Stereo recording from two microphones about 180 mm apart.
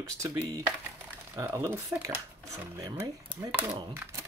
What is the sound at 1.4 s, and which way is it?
Speech, 15° right (ahead or behind).